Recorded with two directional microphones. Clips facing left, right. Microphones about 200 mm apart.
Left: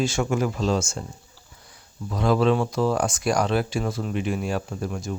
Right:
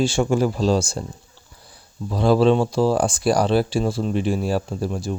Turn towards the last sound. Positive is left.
turn(degrees=-30)  # may be behind; listen again after turning